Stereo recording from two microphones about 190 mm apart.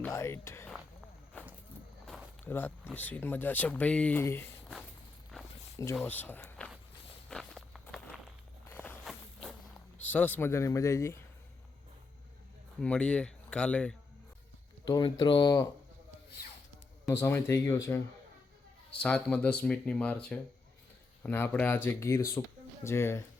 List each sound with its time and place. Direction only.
0.0 s speech: 15° left (ahead or behind)
1.4 s a sound: 10° left (ahead or behind)
2.4 s speech: 10° left (ahead or behind)
5.3 s walk: 5° left (ahead or behind)
5.7 s speech: 15° left (ahead or behind)
7.3 s walk: centre (ahead or behind)
10.0 s speech: 10° left (ahead or behind)
12.8 s speech: 5° left (ahead or behind)
14.8 s speech: 25° left (ahead or behind)
17.1 s speech: 15° left (ahead or behind)
18.9 s speech: 5° left (ahead or behind)